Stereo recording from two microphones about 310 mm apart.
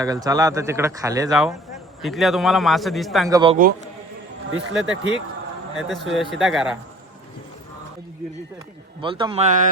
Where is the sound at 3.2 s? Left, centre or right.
Centre.